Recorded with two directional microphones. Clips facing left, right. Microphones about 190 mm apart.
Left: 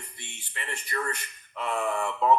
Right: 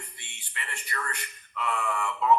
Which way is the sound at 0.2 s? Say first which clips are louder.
Left 5 dB; 40° left (ahead or behind).